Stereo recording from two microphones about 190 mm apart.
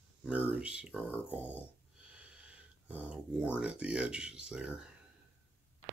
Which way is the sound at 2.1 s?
5° right (ahead or behind).